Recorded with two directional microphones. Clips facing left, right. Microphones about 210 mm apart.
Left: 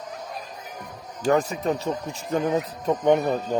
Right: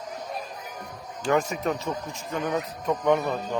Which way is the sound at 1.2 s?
35° left (ahead or behind).